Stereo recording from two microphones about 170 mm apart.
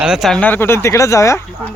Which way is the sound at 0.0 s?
Centre (ahead or behind).